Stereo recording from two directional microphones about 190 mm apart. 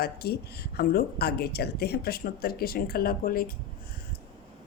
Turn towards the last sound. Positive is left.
turn(degrees=50)  # may be behind; listen again after turning